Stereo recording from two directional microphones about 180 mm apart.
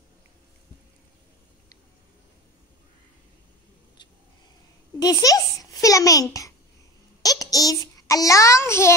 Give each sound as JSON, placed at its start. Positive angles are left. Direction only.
{"t": 4.9, "sound": "a child's voice", "side_deg": 20}
{"t": 7.2, "sound": "a sound", "side_deg": 20}
{"t": 8.1, "sound": "child singing", "side_deg": 20}